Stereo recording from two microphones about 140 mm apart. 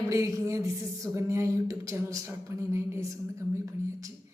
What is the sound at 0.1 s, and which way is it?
A woman's voice, 20° right (ahead or behind).